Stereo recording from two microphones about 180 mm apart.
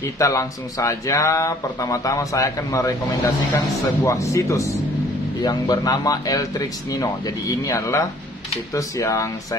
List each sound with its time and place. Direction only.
0.0 s speech: 15° left (ahead or behind)